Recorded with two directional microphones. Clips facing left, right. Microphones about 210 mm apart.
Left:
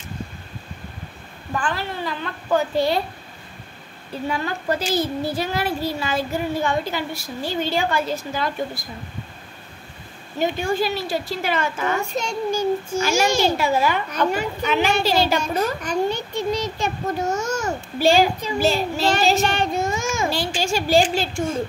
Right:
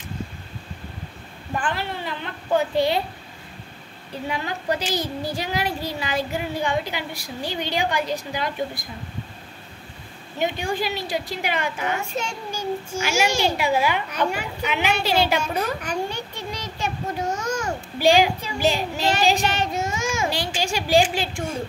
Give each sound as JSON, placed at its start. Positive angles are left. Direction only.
{"t": 1.6, "sound": "a woman's voice", "side_deg": -20}
{"t": 4.3, "sound": "a woman's voice", "side_deg": -15}
{"t": 10.8, "sound": "a woman's voice", "side_deg": -15}
{"t": 17.2, "sound": "a child's voice", "side_deg": 10}
{"t": 17.5, "sound": "babbling", "side_deg": -10}
{"t": 18.4, "sound": "a child's voice", "side_deg": -15}